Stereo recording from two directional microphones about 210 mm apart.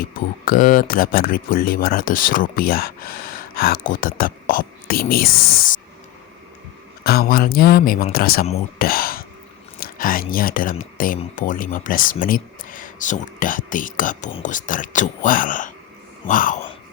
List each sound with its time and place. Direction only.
0.0 s speech: 40° left (ahead or behind)
7.0 s speech: 45° left (ahead or behind)
8.8 s whispering: 45° left (ahead or behind)
9.8 s speech: 40° left (ahead or behind)